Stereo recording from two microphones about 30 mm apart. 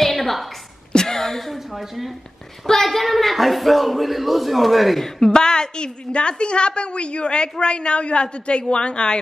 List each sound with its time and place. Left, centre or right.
0.0 s a sound: centre
0.9 s speech: centre
2.6 s a woman's voice: centre
5.0 s a woman's voice: left